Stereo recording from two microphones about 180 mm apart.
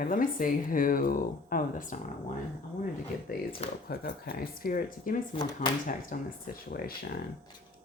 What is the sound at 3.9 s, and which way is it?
Speech, 55° left (ahead or behind).